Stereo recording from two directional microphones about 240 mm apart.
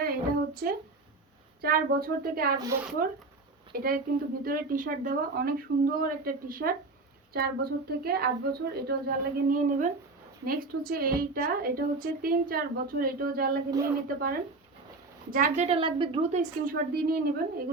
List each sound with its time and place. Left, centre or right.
0.0 s a sound: right
1.6 s a woman's voice: right
2.6 s speech: centre
3.7 s a woman's voice: right
13.7 s speech: centre
14.2 s a woman's voice: right